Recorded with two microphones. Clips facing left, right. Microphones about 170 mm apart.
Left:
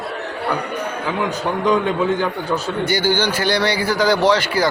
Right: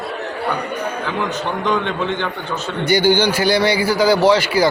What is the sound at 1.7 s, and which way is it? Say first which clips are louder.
Speech: left 4 dB; 10° left (ahead or behind).